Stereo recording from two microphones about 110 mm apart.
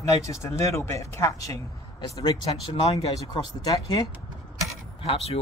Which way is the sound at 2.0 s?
40° left (ahead or behind).